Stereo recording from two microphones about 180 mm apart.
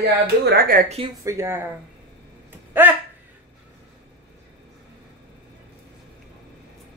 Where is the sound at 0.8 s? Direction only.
35° right (ahead or behind).